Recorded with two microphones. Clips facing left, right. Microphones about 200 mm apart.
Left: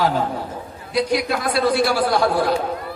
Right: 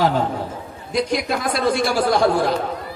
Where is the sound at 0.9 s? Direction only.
45° right (ahead or behind).